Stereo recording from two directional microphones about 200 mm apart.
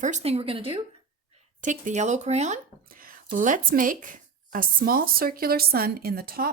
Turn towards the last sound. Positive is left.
turn(degrees=-50)  # may be behind; listen again after turning